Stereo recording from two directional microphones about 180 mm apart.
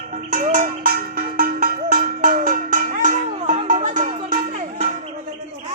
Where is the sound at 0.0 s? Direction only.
45° right (ahead or behind).